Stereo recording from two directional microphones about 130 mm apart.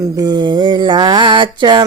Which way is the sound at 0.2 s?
30° right (ahead or behind).